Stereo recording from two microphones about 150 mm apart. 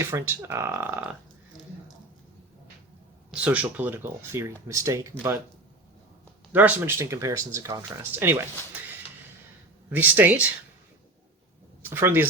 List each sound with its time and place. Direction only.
0.0 s speech: 15° right (ahead or behind)
3.4 s speech: 10° right (ahead or behind)
6.5 s speech: 10° right (ahead or behind)
9.9 s speech: 10° right (ahead or behind)
11.8 s speech: 15° right (ahead or behind)